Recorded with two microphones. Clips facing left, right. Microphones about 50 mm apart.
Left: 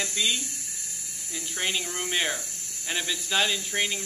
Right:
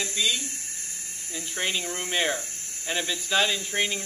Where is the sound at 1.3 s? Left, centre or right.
Centre.